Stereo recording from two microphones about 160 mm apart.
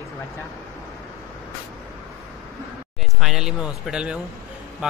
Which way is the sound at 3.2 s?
5° right (ahead or behind).